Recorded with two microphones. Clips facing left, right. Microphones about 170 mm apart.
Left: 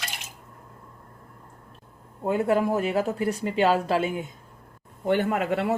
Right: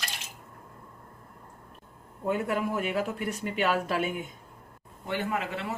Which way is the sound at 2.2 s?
30° left (ahead or behind).